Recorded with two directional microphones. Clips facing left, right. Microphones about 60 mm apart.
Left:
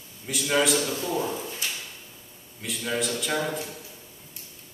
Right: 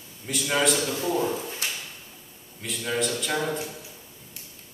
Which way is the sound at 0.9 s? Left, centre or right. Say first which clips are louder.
Right 2 dB; right.